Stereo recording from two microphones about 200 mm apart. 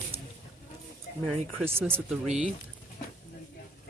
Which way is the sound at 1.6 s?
10° right (ahead or behind).